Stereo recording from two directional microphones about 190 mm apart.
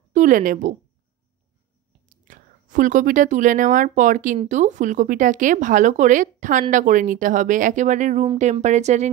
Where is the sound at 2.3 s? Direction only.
45° right (ahead or behind).